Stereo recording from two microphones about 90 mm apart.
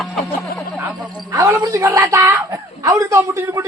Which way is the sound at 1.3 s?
35° right (ahead or behind).